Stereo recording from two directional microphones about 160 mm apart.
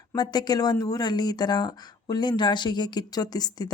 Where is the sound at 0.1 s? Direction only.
25° left (ahead or behind).